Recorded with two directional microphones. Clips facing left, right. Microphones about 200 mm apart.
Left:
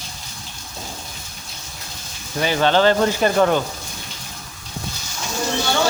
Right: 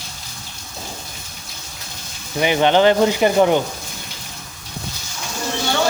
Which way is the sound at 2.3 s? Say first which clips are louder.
Right 2 dB; 20° right (ahead or behind).